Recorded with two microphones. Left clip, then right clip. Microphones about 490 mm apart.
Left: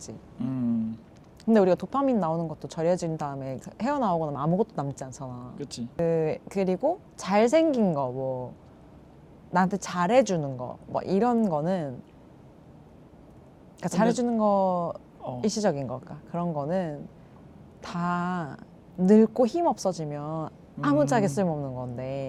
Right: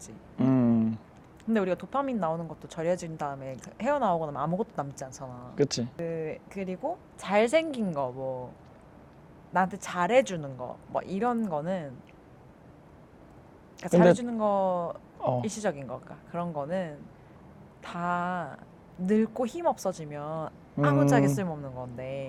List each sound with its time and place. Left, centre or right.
0.3 s a sound: right
1.5 s a woman's voice: left
5.5 s speech: right
6.0 s a woman's voice: left
9.5 s a woman's voice: left
14.1 s a woman's voice: left